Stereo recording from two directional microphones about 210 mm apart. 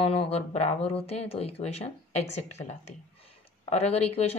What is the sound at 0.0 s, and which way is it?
Speech, 30° left (ahead or behind).